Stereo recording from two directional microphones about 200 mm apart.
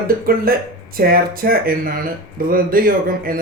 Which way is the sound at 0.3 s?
45° right (ahead or behind).